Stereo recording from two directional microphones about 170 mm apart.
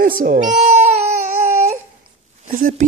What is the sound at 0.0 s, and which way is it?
Speech, 55° right (ahead or behind).